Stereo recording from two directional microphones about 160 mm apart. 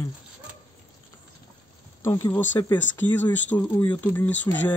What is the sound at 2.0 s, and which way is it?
Speech, 15° left (ahead or behind).